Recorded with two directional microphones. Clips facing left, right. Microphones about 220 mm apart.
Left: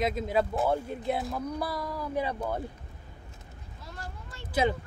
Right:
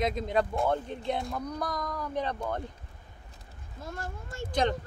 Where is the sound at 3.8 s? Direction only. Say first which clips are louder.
Right 5 dB; 50° right (ahead or behind).